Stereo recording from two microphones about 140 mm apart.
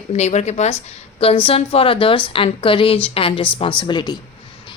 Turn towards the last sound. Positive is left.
turn(degrees=35)  # may be behind; listen again after turning